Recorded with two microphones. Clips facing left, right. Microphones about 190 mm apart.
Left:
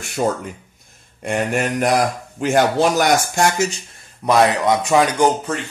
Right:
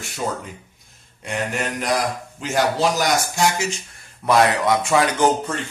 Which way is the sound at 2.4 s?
55° left (ahead or behind).